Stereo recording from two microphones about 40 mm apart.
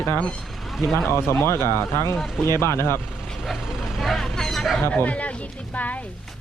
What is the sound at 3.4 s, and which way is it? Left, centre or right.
Vehicle, centre.